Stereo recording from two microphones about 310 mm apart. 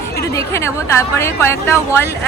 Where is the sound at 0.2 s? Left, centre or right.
Centre.